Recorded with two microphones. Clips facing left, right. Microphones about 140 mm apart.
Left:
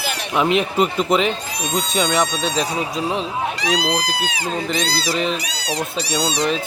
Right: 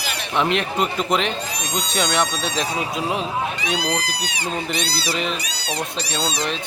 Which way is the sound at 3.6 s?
90° left.